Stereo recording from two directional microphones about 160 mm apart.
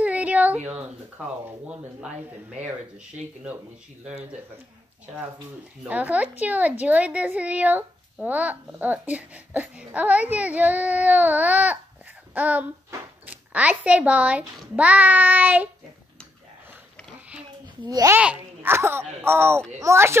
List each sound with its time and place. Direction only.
0.0 s a sound: 10° right (ahead or behind)
5.9 s speech: 10° right (ahead or behind)
17.8 s a child's voice: 20° right (ahead or behind)
18.2 s speech: 10° right (ahead or behind)